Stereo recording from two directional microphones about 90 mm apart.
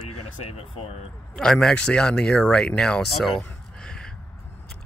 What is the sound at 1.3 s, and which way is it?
Speech, 5° left (ahead or behind).